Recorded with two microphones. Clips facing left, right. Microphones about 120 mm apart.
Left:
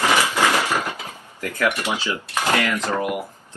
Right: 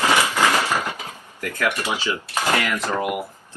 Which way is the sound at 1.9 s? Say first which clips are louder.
Even; 15° right (ahead or behind).